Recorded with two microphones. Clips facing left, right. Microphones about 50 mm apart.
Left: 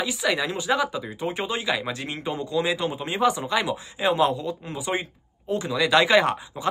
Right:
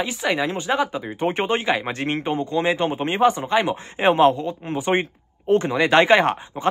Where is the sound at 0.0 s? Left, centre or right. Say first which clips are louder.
Right 2 dB; right.